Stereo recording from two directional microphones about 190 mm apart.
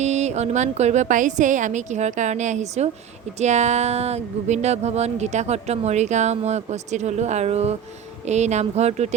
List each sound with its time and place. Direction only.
0.0 s speech: 35° right (ahead or behind)